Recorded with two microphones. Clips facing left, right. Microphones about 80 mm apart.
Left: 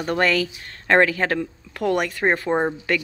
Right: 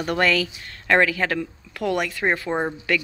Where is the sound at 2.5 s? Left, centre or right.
Centre.